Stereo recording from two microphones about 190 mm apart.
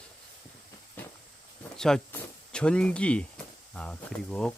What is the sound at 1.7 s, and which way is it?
Speech, 5° left (ahead or behind).